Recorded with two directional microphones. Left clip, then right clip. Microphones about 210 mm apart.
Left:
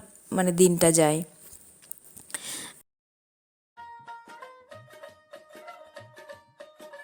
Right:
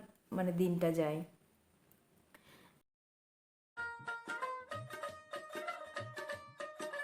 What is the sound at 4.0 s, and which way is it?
Music, centre (ahead or behind).